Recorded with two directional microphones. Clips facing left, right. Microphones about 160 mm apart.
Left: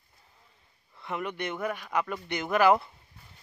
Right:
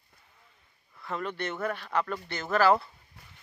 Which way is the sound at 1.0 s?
15° left (ahead or behind).